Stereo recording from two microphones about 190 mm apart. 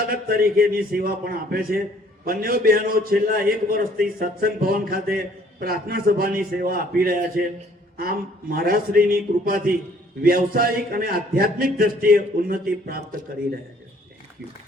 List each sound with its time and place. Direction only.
0.1 s a man's voice: 50° right (ahead or behind)